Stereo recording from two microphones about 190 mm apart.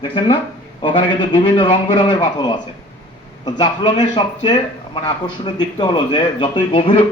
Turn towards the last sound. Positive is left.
turn(degrees=25)  # may be behind; listen again after turning